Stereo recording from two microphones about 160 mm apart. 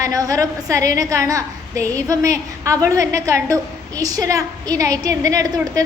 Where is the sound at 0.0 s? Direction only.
20° right (ahead or behind).